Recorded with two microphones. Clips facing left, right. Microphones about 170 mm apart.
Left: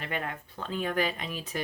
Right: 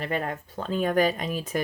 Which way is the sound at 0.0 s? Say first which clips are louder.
Right 6 dB; 40° right (ahead or behind).